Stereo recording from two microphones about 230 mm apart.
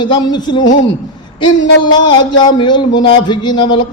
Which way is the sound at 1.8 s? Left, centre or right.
Centre.